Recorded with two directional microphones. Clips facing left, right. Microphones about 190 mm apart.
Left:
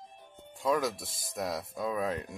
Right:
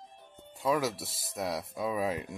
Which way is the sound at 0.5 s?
5° right (ahead or behind).